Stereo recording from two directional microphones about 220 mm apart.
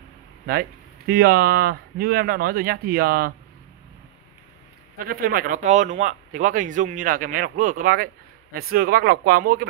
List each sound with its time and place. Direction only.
0.5 s speech: 45° right (ahead or behind)
4.9 s speech: 40° right (ahead or behind)